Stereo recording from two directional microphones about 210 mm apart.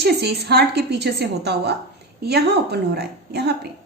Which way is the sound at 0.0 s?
50° right (ahead or behind).